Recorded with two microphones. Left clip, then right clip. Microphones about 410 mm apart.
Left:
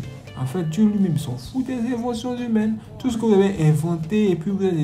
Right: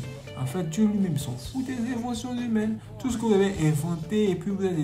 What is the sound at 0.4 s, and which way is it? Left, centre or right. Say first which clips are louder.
Speech: left 5 dB; centre.